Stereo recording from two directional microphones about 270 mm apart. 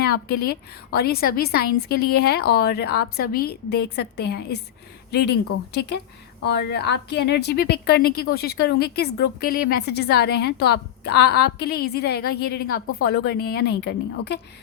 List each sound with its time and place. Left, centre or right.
0.0 s a woman's voice: left
5.7 s a woman's voice: left